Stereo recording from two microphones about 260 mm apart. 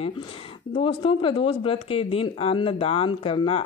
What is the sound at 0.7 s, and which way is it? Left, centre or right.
Speech, centre.